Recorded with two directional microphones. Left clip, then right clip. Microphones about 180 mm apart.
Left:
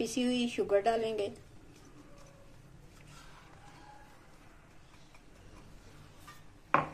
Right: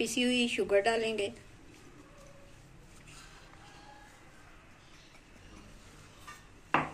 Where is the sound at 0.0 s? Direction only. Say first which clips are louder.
Right 3 dB; 30° left (ahead or behind).